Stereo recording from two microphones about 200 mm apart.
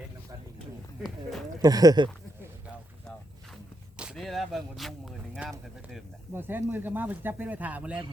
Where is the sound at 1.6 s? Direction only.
20° right (ahead or behind).